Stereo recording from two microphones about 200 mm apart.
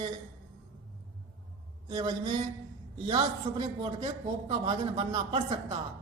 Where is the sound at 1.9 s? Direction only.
20° right (ahead or behind).